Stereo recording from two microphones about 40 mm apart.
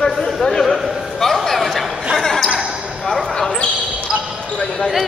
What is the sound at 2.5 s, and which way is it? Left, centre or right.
Basketball bounce, centre.